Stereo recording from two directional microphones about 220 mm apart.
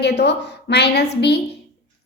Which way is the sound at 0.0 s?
50° left (ahead or behind).